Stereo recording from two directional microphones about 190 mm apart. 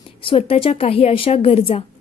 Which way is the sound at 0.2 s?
30° left (ahead or behind).